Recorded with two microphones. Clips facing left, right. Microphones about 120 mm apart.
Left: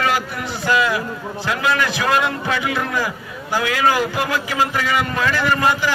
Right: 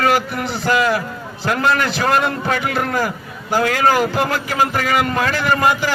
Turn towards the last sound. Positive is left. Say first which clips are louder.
# right 1 dB
turn(degrees=-45)  # may be behind; listen again after turning